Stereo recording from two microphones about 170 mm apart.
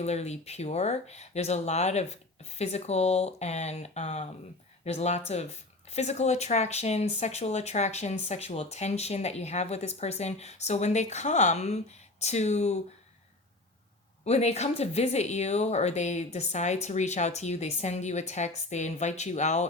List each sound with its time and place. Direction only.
0.0 s speech: 40° left (ahead or behind)
14.3 s speech: 40° left (ahead or behind)